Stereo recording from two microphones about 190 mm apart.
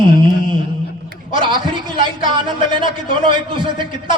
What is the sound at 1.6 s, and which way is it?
A man's voice, 25° right (ahead or behind).